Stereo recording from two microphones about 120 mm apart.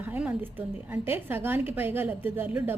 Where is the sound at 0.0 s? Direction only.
15° right (ahead or behind).